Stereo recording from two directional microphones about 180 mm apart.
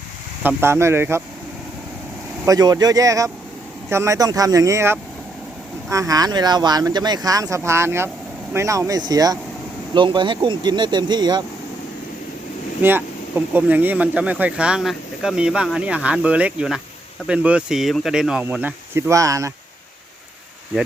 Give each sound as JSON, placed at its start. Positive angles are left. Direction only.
{"t": 0.4, "sound": "speech", "side_deg": -15}
{"t": 2.5, "sound": "speech", "side_deg": -20}
{"t": 12.8, "sound": "speech", "side_deg": -10}